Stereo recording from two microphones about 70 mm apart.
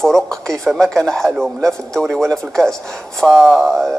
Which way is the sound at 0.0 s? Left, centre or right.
Centre.